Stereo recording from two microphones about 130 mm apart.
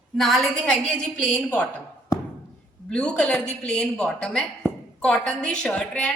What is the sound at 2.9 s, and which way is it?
A woman's voice, 5° left (ahead or behind).